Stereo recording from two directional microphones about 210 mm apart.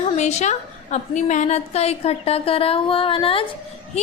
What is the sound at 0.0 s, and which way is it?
A woman's voice, 30° left (ahead or behind).